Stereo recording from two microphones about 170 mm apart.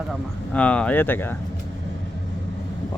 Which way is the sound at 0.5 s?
10° left (ahead or behind).